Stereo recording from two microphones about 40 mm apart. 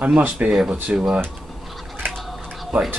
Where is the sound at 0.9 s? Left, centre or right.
Centre.